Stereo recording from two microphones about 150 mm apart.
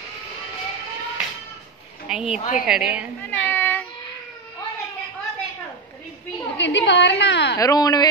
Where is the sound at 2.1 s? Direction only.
5° right (ahead or behind).